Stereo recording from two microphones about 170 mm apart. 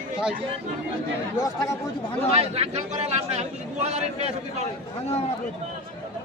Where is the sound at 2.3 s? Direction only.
40° right (ahead or behind).